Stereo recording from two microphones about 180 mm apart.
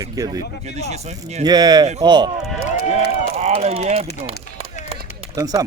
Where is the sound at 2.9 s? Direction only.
35° right (ahead or behind).